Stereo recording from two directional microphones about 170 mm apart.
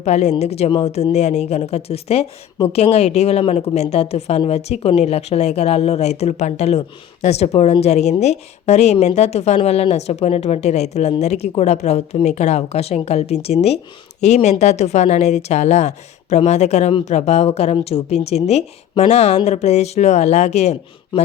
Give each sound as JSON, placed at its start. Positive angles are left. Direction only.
{"t": 0.0, "sound": "a woman's voice", "side_deg": 40}